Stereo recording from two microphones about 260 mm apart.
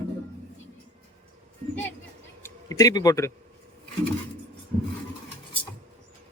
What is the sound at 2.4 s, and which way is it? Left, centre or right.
Speech, centre.